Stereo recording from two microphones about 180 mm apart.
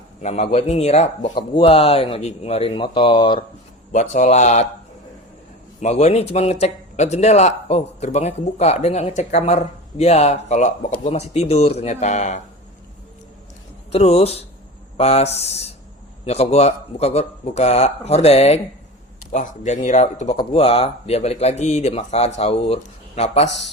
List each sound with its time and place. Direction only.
0.2 s speech: 40° left (ahead or behind)
3.9 s speech: 40° left (ahead or behind)
5.8 s speech: 40° left (ahead or behind)
13.9 s speech: 35° left (ahead or behind)